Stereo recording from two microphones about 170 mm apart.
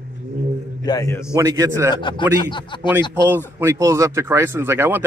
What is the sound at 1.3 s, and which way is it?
Speech, 20° right (ahead or behind).